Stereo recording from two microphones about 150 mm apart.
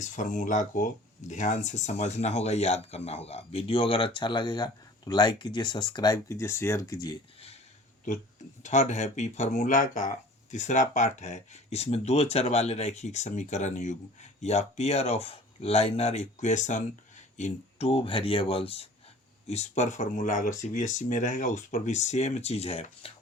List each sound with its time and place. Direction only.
0.0 s speech: 55° left (ahead or behind); by 7.2 s 25° left (ahead or behind)
8.6 s speech: 50° left (ahead or behind)